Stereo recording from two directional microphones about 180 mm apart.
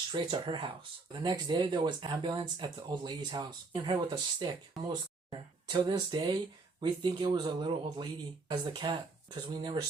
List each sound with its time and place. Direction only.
0.1 s speech: 25° right (ahead or behind)